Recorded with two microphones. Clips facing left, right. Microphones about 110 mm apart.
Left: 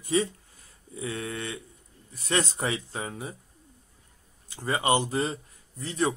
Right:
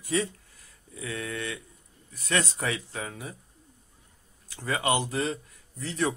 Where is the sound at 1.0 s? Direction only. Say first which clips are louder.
Left 1 dB; 30° left (ahead or behind).